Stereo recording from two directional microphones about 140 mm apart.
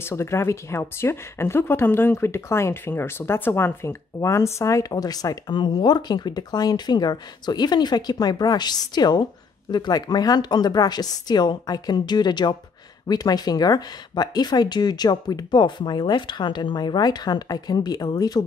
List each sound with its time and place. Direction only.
0.0 s speech: 20° left (ahead or behind)